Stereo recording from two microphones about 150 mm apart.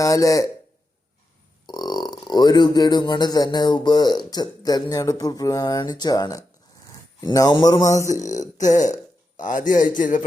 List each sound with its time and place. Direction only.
0.0 s a man's voice: 20° left (ahead or behind)
1.6 s a man's voice: 30° left (ahead or behind)
8.6 s a man's voice: 55° left (ahead or behind)